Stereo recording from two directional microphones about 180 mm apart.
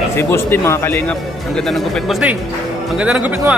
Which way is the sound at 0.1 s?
15° left (ahead or behind).